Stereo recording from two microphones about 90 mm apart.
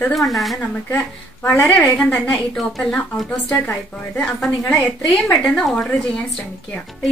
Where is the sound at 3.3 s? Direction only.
15° left (ahead or behind).